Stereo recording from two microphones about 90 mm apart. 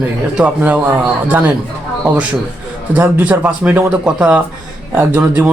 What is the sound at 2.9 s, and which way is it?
Speech, 15° right (ahead or behind).